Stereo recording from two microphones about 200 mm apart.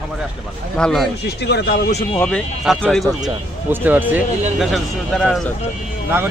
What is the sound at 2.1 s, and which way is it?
Speech, 5° left (ahead or behind).